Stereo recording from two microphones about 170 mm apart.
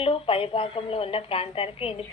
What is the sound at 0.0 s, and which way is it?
A woman's voice, 35° left (ahead or behind).